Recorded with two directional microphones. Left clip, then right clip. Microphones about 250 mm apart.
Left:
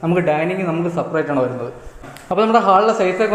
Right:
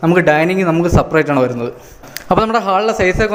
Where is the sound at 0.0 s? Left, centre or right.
Right.